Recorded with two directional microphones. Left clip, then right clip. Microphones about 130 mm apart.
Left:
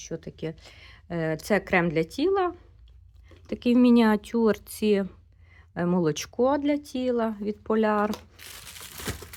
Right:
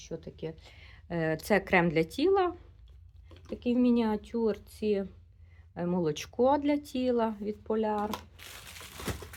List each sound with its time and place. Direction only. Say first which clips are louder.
0.0 s speech: left 5 dB; 55° left (ahead or behind); by 0.9 s 35° left (ahead or behind)
1.0 s speech: left 2 dB; 20° left (ahead or behind)
3.4 s speech: left 7 dB; 65° left (ahead or behind)
5.7 s speech: left 5 dB; 45° left (ahead or behind); by 7.4 s 20° left (ahead or behind)
7.7 s speech: left 7 dB; 60° left (ahead or behind)